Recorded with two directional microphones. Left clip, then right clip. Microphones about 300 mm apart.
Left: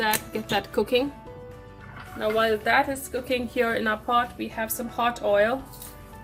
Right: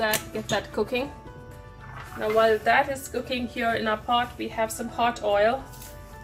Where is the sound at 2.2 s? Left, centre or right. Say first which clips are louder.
Right 2 dB; left.